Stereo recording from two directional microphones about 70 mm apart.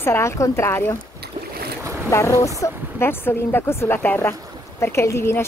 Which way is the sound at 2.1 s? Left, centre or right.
Left.